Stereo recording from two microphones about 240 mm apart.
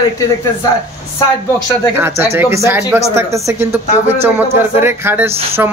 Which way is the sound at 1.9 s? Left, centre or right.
Centre.